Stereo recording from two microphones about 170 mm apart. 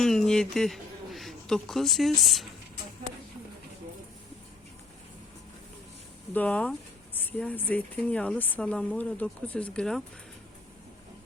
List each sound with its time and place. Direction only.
0.0 s a man's voice: 5° left (ahead or behind)
6.3 s speech: 10° left (ahead or behind)